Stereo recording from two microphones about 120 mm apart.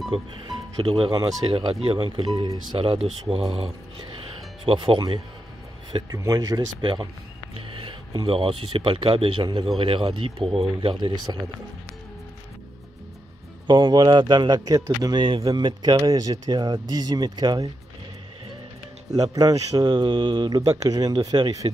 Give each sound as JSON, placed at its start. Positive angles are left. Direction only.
{"t": 0.1, "sound": "speech", "side_deg": -40}
{"t": 3.6, "sound": "speech", "side_deg": -40}
{"t": 6.1, "sound": "speech", "side_deg": -30}
{"t": 13.7, "sound": "speech", "side_deg": -40}
{"t": 19.1, "sound": "speech", "side_deg": -30}